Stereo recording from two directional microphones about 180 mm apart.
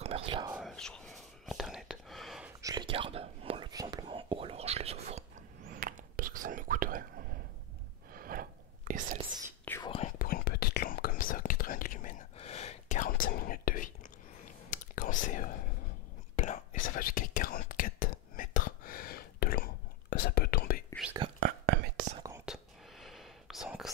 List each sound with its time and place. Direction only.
0.0 s whispering: 35° right (ahead or behind)
0.6 s whispering: centre (ahead or behind)
2.6 s whispering: 25° right (ahead or behind)
5.7 s whispering: 50° right (ahead or behind)
9.8 s whispering: 35° left (ahead or behind)
10.1 s whispering: 55° left (ahead or behind)
21.4 s whispering: 55° right (ahead or behind)
22.4 s whispering: centre (ahead or behind)